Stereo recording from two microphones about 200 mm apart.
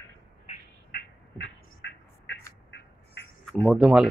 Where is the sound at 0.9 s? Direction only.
60° left (ahead or behind).